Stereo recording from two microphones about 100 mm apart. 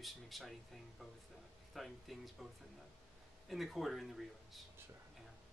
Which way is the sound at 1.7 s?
Centre (ahead or behind).